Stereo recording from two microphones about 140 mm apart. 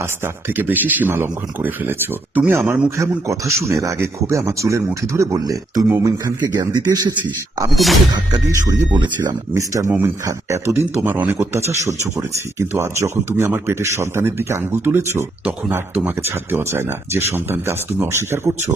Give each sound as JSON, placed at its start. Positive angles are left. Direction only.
{"t": 0.0, "sound": "speech", "side_deg": -15}
{"t": 7.7, "sound": "speech", "side_deg": 0}
{"t": 8.1, "sound": "speech", "side_deg": -30}